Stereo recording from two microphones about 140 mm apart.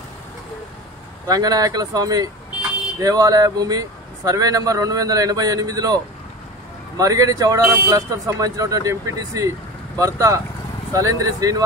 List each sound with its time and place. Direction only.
1.2 s speech: 25° right (ahead or behind)
7.0 s speech: 25° right (ahead or behind)